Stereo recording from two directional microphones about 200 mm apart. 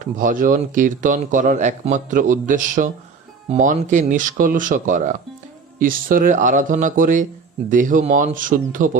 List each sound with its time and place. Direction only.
0.0 s a man's voice: 40° right (ahead or behind)